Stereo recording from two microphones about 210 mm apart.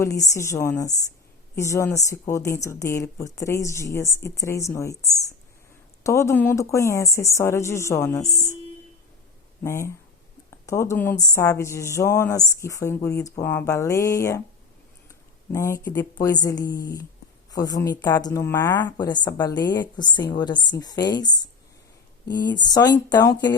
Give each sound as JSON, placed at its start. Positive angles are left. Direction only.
{"t": 0.0, "sound": "a woman's voice", "side_deg": 15}
{"t": 6.0, "sound": "a woman's voice", "side_deg": 15}
{"t": 8.3, "sound": "speech", "side_deg": -10}
{"t": 9.6, "sound": "a woman's voice", "side_deg": 15}
{"t": 15.5, "sound": "a woman's voice", "side_deg": 15}